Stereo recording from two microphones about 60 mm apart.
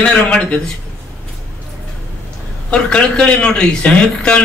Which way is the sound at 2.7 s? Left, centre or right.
Centre.